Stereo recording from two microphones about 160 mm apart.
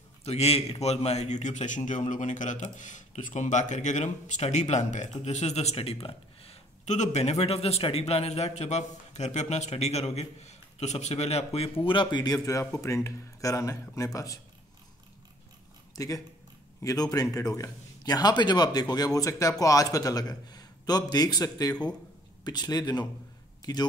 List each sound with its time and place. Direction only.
0.2 s a man's voice: 40° left (ahead or behind); by 14.4 s 20° left (ahead or behind)
16.0 s a man's voice: 20° left (ahead or behind)